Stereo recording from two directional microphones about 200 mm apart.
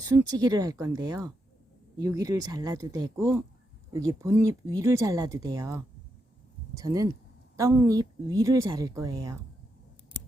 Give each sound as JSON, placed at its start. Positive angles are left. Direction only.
{"t": 0.0, "sound": "speech", "side_deg": -15}